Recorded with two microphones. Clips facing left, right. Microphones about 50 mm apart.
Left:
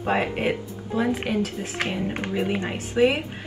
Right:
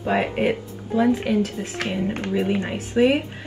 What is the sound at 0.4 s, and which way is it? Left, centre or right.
Speech, left.